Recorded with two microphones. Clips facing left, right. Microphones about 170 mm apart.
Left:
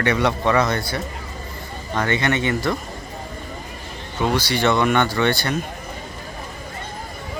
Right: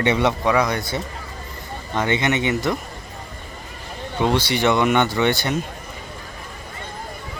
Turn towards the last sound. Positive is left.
turn(degrees=-20)  # may be behind; listen again after turning